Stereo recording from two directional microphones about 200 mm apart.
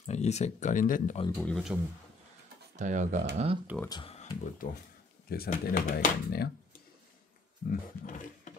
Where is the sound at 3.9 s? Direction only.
30° left (ahead or behind).